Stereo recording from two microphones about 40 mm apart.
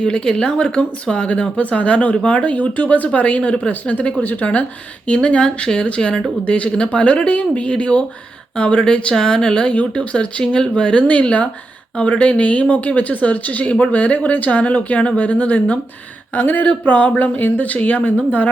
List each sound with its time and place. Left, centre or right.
0.0 s speech: left
4.2 s a woman's voice: left
5.0 s a woman's voice: left